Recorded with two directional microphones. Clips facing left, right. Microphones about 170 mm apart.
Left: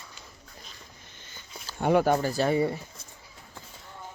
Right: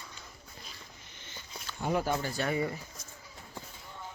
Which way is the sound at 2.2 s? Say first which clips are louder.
Left 7 dB; 35° left (ahead or behind).